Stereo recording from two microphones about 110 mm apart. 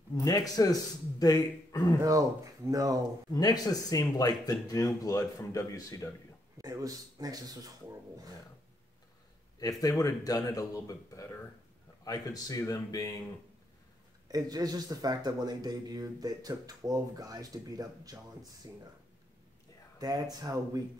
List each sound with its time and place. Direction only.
0.1 s a man's voice: 35° left (ahead or behind)
2.0 s speech: 30° right (ahead or behind)
3.3 s a man's voice: 35° left (ahead or behind)
6.6 s speech: 35° right (ahead or behind)
9.6 s a man's voice: 35° left (ahead or behind)
14.2 s speech: 35° right (ahead or behind)
20.0 s speech: 35° right (ahead or behind)